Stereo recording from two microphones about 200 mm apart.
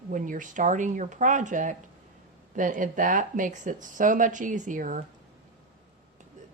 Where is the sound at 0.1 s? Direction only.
40° right (ahead or behind).